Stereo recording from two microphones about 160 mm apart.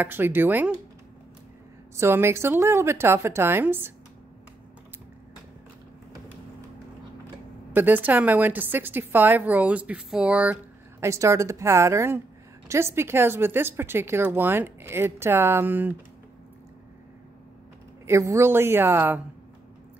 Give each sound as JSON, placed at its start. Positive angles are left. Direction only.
{"t": 0.0, "sound": "a woman's voice", "side_deg": -15}
{"t": 2.0, "sound": "a woman's voice", "side_deg": -15}
{"t": 7.7, "sound": "a woman's voice", "side_deg": -10}
{"t": 18.0, "sound": "a woman's voice", "side_deg": -20}